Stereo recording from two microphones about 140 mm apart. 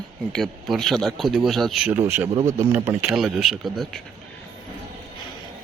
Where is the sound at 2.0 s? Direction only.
15° right (ahead or behind).